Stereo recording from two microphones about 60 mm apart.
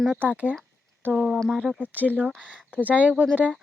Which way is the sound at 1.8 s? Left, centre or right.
Right.